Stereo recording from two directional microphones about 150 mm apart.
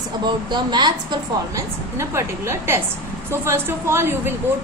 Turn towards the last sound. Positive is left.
turn(degrees=-15)  # may be behind; listen again after turning